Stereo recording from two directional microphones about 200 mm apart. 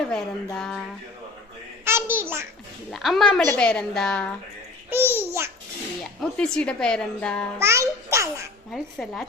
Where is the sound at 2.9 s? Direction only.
Centre (ahead or behind).